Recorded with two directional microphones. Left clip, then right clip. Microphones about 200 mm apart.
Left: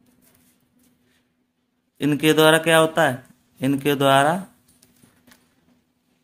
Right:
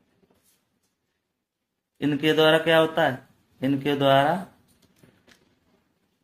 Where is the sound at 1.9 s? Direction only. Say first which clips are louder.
Left 4 dB; 30° left (ahead or behind).